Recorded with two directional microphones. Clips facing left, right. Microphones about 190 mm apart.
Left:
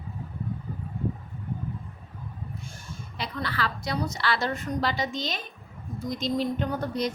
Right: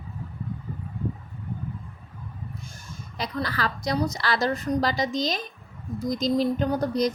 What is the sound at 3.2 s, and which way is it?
A woman's voice, 40° right (ahead or behind).